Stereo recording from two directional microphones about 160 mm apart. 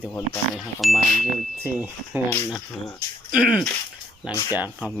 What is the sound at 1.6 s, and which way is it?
Speech, 10° right (ahead or behind).